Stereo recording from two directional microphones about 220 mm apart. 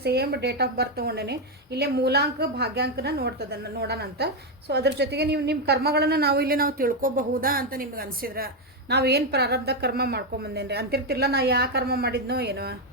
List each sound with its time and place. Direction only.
0.0 s a woman's voice: 45° right (ahead or behind)